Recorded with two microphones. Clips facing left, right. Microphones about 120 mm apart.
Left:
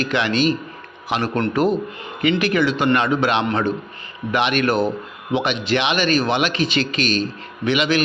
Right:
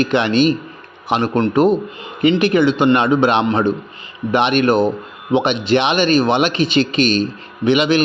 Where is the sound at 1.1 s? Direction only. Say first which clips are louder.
Right 5 dB; 25° right (ahead or behind).